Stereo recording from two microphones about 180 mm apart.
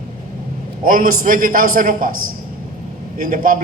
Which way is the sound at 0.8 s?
50° right (ahead or behind).